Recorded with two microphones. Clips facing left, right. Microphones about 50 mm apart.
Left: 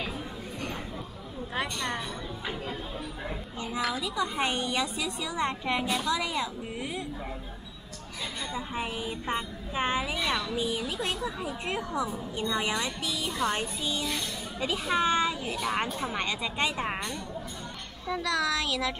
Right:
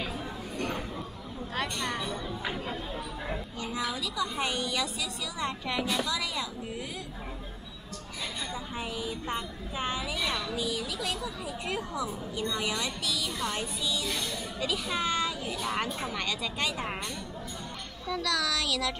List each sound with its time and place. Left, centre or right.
3.9 s a woman's voice: left
5.8 s a woman's voice: centre
6.0 s a woman's voice: left
8.5 s a woman's voice: left
18.0 s a woman's voice: left